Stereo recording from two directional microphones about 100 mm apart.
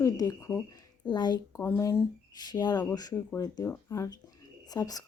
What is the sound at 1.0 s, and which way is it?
Speech, 45° left (ahead or behind).